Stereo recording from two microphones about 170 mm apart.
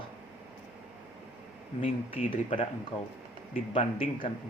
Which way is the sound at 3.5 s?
50° left (ahead or behind).